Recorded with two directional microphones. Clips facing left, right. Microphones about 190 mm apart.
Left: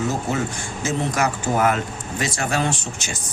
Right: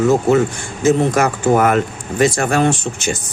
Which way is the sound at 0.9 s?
55° right (ahead or behind).